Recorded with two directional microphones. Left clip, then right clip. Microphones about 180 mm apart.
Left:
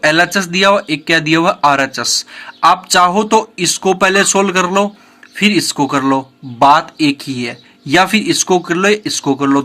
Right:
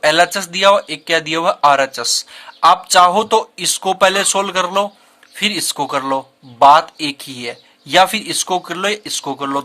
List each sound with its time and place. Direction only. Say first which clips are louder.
0.0 s speech: left 1 dB; 30° right (ahead or behind)